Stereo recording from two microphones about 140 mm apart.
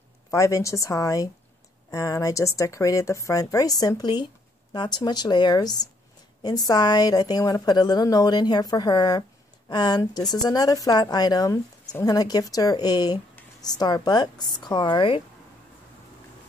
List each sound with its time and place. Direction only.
0.3 s a woman's voice: 20° left (ahead or behind)